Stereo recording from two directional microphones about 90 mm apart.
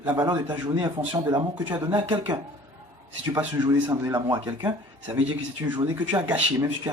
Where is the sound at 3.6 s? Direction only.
55° right (ahead or behind).